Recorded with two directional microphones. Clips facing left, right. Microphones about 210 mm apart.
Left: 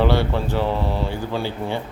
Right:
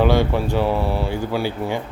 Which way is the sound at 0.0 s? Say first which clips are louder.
Right 2 dB; 15° right (ahead or behind).